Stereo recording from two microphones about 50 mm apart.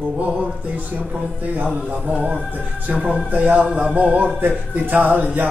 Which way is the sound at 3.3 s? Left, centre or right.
Right.